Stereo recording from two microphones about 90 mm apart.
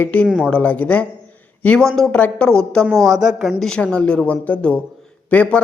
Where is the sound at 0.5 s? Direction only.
15° left (ahead or behind).